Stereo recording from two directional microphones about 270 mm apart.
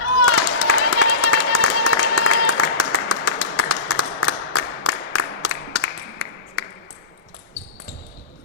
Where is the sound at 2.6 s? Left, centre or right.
Left.